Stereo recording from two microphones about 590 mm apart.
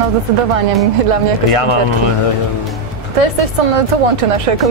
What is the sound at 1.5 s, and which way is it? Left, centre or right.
Speech, left.